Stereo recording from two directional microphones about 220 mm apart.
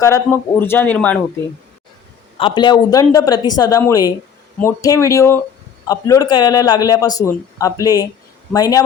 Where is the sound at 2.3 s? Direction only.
20° left (ahead or behind).